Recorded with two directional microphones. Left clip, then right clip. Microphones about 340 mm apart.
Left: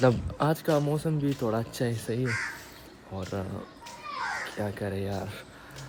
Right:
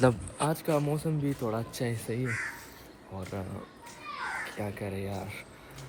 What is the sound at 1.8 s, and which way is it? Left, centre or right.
Speech, centre.